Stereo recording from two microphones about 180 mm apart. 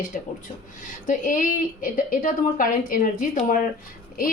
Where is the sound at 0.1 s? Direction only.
45° left (ahead or behind).